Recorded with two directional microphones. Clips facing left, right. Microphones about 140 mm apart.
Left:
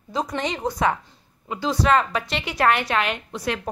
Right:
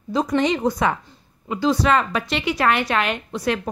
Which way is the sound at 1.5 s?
35° left (ahead or behind).